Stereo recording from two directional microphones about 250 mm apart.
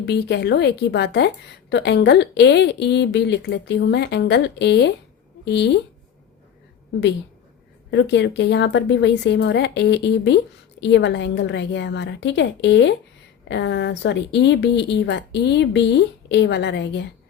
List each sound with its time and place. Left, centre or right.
0.0 s a woman's voice: left
7.9 s a woman's voice: left